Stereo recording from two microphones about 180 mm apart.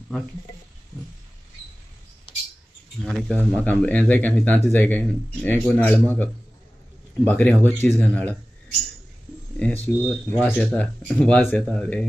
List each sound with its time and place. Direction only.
2.3 s rodents: 30° left (ahead or behind)
3.1 s speech: 5° left (ahead or behind)
7.2 s speech: 10° left (ahead or behind)
9.6 s speech: 10° left (ahead or behind)